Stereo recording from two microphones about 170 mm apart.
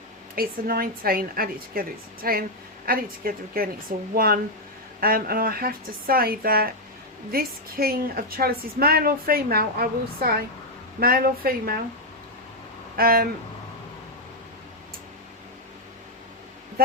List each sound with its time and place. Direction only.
0.3 s a woman's voice: 60° right (ahead or behind)
13.0 s a woman's voice: 60° right (ahead or behind)